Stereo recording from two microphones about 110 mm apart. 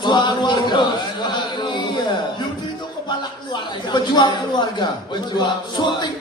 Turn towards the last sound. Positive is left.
turn(degrees=40)  # may be behind; listen again after turning